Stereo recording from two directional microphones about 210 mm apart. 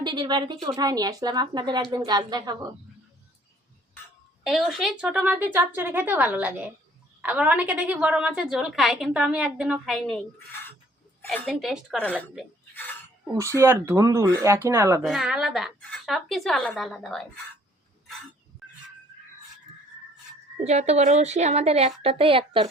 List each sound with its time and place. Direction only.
0.0 s speech: 20° right (ahead or behind)
4.4 s a woman's voice: centre (ahead or behind)
15.0 s a woman's voice: centre (ahead or behind)
20.7 s a woman's voice: 30° right (ahead or behind)